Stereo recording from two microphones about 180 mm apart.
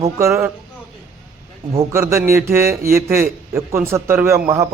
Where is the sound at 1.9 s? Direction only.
15° right (ahead or behind).